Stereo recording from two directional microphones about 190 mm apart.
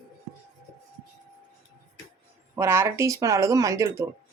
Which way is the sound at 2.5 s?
15° right (ahead or behind).